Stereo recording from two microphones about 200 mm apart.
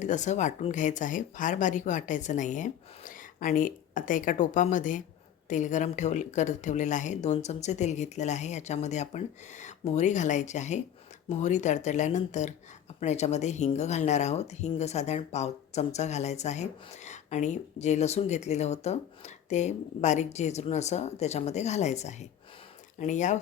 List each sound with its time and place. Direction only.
0.0 s speech: 35° left (ahead or behind)